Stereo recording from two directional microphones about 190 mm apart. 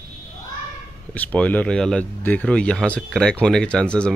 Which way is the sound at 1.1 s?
5° left (ahead or behind).